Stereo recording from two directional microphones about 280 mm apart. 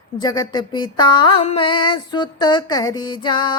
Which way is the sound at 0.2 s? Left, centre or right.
Centre.